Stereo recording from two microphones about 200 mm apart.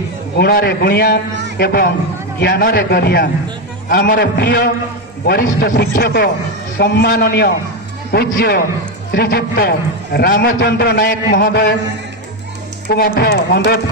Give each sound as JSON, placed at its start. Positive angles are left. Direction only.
{"t": 0.4, "sound": "a man's voice", "side_deg": 50}
{"t": 12.9, "sound": "a man's voice", "side_deg": 50}